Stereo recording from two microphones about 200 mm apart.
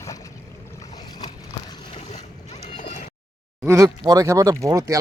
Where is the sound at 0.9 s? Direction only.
20° left (ahead or behind).